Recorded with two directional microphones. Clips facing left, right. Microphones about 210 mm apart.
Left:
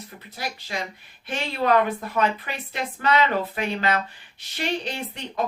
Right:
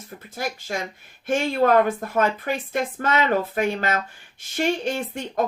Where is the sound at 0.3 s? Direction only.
45° right (ahead or behind).